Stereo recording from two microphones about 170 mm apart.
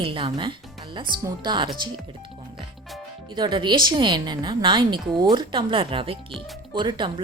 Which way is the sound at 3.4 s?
25° right (ahead or behind).